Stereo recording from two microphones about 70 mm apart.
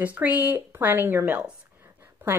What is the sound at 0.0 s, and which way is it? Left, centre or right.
A woman's voice, right.